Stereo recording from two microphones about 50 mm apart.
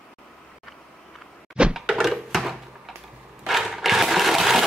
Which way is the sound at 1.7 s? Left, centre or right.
Centre.